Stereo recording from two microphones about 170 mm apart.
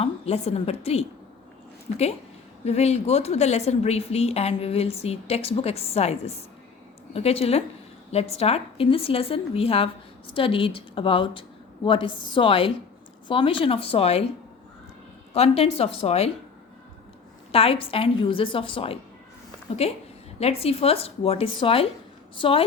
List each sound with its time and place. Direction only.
0.0 s a woman's voice: 40° left (ahead or behind)
2.6 s a woman's voice: 40° left (ahead or behind)
15.3 s a woman's voice: 35° left (ahead or behind)
17.5 s a woman's voice: 35° left (ahead or behind)